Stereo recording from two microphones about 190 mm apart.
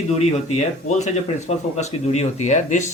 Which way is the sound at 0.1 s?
35° left (ahead or behind).